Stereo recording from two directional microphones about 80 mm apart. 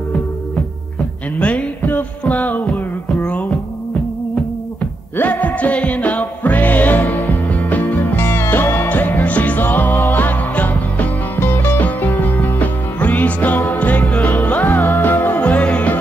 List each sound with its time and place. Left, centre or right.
1.4 s music: centre
5.1 s music: left